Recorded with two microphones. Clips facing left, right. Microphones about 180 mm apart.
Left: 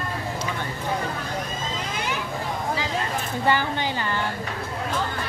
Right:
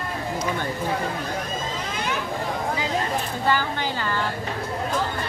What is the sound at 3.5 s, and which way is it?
Speech, 20° left (ahead or behind).